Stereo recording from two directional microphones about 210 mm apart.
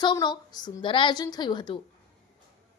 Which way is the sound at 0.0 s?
20° left (ahead or behind).